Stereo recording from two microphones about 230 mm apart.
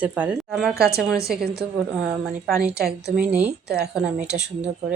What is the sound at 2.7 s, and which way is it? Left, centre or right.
Speech, right.